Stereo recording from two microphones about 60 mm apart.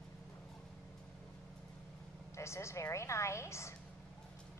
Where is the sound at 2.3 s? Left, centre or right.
Left.